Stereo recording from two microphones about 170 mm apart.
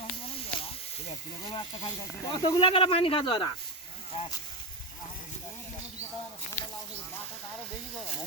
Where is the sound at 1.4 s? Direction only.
30° left (ahead or behind).